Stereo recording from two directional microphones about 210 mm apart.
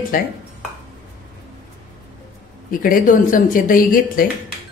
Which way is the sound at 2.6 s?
40° left (ahead or behind).